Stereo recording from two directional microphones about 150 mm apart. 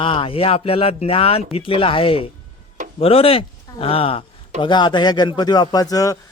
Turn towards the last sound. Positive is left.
turn(degrees=20)  # may be behind; listen again after turning